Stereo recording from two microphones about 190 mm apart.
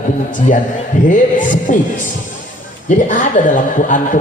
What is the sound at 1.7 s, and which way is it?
Speech, 45° left (ahead or behind).